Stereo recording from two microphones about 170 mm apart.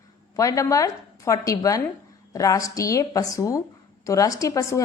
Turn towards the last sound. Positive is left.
turn(degrees=20)  # may be behind; listen again after turning